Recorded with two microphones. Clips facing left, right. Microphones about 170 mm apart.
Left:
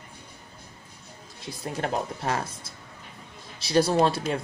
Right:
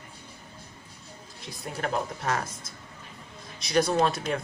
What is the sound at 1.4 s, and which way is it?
Speech, 30° left (ahead or behind).